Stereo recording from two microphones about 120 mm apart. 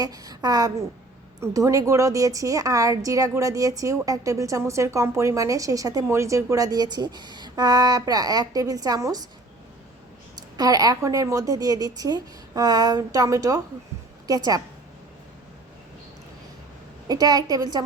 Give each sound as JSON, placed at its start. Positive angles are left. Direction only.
{"t": 0.0, "sound": "a woman's voice", "side_deg": -30}
{"t": 10.3, "sound": "a woman's voice", "side_deg": -30}
{"t": 17.1, "sound": "a woman's voice", "side_deg": -35}